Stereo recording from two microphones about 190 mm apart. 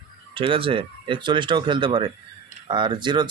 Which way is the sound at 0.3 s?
30° right (ahead or behind).